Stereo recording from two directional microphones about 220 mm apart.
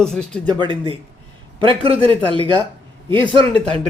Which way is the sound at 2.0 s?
25° right (ahead or behind).